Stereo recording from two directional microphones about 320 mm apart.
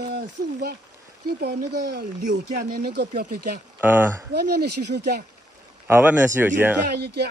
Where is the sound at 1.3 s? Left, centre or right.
Right.